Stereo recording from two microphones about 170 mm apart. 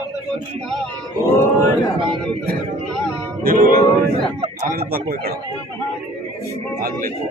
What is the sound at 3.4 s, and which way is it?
Speech, 60° right (ahead or behind).